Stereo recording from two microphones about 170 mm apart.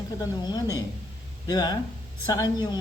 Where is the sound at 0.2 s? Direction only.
25° left (ahead or behind).